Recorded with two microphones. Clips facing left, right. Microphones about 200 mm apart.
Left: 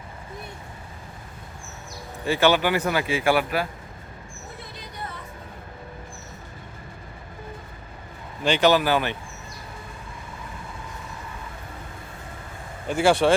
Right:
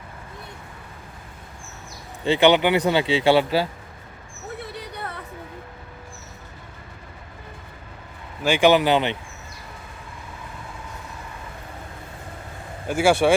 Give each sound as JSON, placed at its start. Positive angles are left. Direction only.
{"t": 2.2, "sound": "speech", "side_deg": -20}
{"t": 4.6, "sound": "a sound", "side_deg": -65}
{"t": 8.4, "sound": "speech", "side_deg": -10}
{"t": 12.9, "sound": "speech", "side_deg": -5}